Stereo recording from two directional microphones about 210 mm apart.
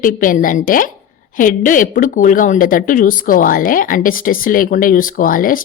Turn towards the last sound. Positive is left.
turn(degrees=40)  # may be behind; listen again after turning